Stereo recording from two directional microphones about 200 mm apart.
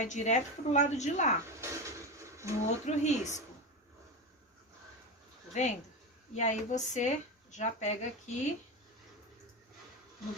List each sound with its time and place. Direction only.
0.0 s a woman's voice: 35° left (ahead or behind)
1.6 s a sound: 15° right (ahead or behind)
2.8 s a woman's voice: 35° left (ahead or behind)
5.5 s a woman's voice: 35° left (ahead or behind)